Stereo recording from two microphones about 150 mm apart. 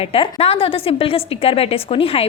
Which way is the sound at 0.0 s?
40° left (ahead or behind).